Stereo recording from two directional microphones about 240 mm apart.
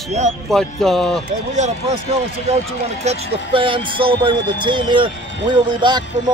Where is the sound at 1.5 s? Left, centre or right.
Right.